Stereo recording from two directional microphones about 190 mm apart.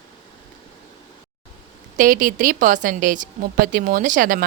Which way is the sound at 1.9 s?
45° right (ahead or behind).